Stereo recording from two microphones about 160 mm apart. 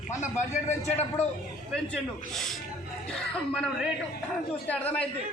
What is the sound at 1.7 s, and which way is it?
A man's voice, 5° left (ahead or behind).